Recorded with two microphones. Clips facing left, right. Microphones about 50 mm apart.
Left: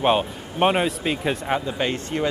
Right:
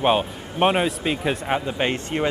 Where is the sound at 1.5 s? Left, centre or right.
Centre.